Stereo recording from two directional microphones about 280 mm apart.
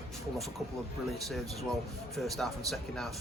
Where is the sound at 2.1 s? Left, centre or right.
Centre.